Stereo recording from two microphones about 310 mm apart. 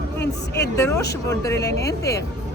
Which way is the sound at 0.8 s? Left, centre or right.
Centre.